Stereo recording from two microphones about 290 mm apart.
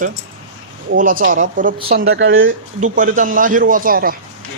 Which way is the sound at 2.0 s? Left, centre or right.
Right.